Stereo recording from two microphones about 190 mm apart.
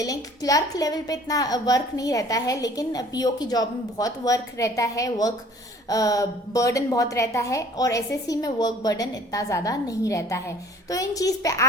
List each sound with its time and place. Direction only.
0.0 s a woman's voice: 20° left (ahead or behind)